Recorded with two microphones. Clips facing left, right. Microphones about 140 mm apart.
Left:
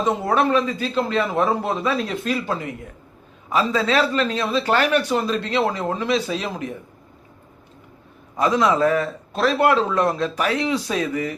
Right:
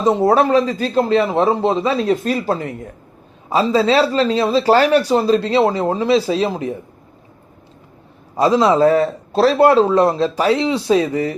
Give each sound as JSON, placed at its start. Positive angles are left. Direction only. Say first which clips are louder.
{"t": 0.0, "sound": "speech", "louder": "right 6 dB", "side_deg": -30}
{"t": 2.0, "sound": "speech", "louder": "right 7 dB", "side_deg": -40}
{"t": 8.4, "sound": "speech", "louder": "right 5 dB", "side_deg": -30}